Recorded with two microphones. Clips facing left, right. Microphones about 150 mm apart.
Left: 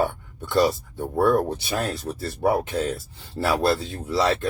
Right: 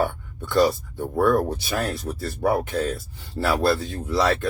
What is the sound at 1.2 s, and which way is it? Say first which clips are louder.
Speech: even; 20° left (ahead or behind).